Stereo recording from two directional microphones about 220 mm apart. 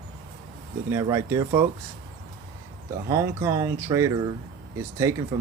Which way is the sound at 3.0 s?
15° right (ahead or behind).